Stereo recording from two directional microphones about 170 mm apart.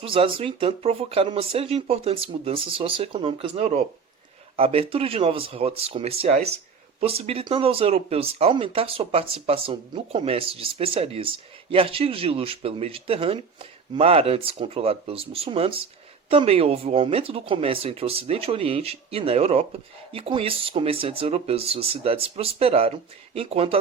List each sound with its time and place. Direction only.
0.0 s speech: 30° right (ahead or behind)